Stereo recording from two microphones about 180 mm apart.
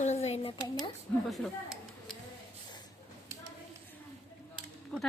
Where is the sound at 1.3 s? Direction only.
Centre (ahead or behind).